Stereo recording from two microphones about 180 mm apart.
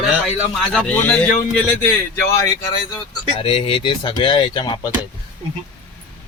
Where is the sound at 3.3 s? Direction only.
30° left (ahead or behind).